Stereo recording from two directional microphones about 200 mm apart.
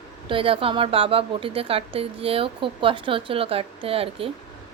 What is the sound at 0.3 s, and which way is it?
A woman's voice, 25° right (ahead or behind).